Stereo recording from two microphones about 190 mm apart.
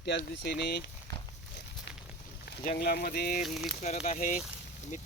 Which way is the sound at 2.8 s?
55° left (ahead or behind).